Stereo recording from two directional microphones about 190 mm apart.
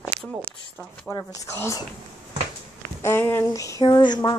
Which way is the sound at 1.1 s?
15° left (ahead or behind).